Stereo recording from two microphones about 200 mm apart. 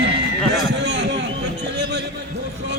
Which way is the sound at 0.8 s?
60° right (ahead or behind).